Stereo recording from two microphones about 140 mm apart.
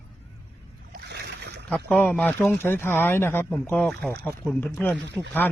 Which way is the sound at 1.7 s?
5° left (ahead or behind).